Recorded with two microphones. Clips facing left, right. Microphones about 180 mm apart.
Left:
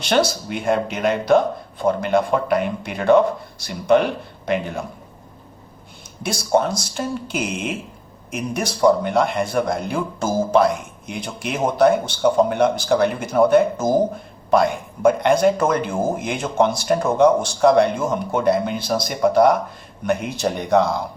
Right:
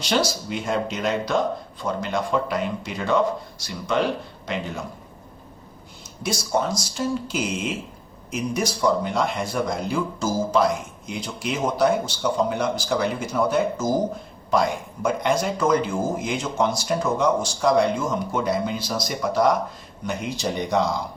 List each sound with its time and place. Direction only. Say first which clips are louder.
0.0 s speech: left 4 dB; 55° left (ahead or behind)
6.2 s speech: left 5 dB; 60° left (ahead or behind)